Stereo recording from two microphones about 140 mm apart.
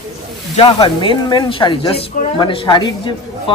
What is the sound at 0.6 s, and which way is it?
A woman's voice, 40° left (ahead or behind).